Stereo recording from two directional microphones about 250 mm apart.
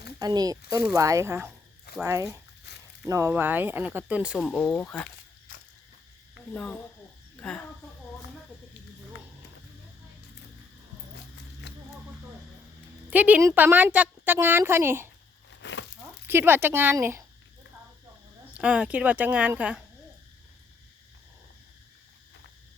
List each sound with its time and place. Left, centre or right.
0.2 s a woman's voice: centre
6.5 s speech: centre
11.6 s a sound: left
13.1 s a woman's voice: centre
15.4 s a sound: left
16.2 s a woman's voice: centre
18.5 s speech: centre